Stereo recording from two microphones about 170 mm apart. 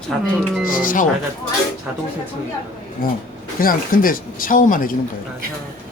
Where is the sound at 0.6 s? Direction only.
55° left (ahead or behind).